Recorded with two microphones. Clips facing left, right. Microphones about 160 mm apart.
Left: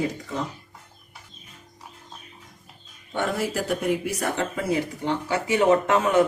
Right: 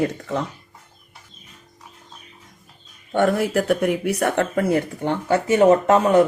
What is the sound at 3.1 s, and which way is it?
Speech, 55° right (ahead or behind).